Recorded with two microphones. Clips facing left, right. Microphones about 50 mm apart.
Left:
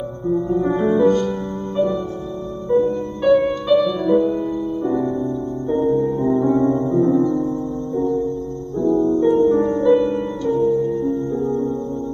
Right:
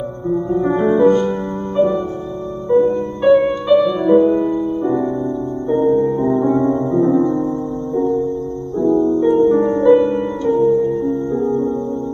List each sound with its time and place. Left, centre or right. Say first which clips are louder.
0.3 s music: right 2 dB; centre
9.2 s music: right 2 dB; centre